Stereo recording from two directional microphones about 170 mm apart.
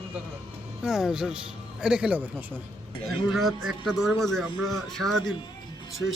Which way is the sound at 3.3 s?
Centre (ahead or behind).